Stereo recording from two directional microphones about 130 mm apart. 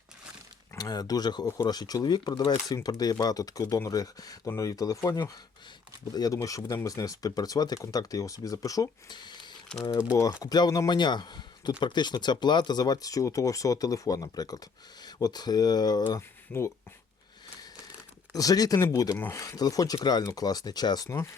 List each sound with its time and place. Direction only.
0.8 s speech: 30° left (ahead or behind)
16.5 s speech: 20° left (ahead or behind)
18.3 s speech: 30° left (ahead or behind)